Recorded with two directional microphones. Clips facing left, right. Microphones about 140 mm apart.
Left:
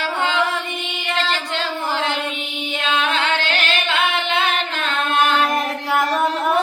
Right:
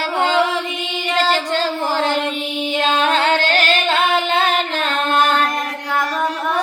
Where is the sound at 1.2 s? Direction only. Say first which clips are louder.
Right 7 dB; 40° right (ahead or behind).